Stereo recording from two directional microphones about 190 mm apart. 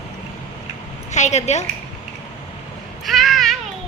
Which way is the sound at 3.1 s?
Centre (ahead or behind).